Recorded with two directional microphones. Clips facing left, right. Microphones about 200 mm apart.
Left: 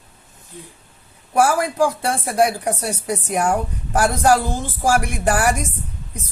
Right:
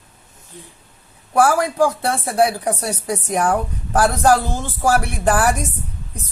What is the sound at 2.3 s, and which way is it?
Speech, 10° left (ahead or behind).